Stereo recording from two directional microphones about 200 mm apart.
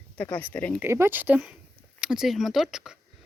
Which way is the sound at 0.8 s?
10° right (ahead or behind).